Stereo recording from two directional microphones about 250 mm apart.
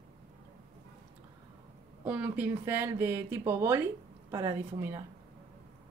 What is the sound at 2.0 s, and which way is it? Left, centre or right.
Speech, centre.